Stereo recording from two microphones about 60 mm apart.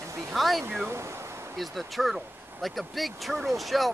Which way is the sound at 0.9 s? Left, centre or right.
Right.